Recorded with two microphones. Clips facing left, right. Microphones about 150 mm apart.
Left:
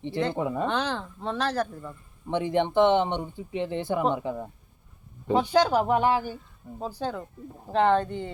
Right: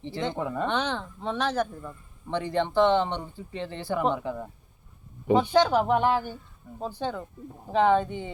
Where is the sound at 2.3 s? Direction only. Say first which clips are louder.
Left 2 dB; 20° left (ahead or behind).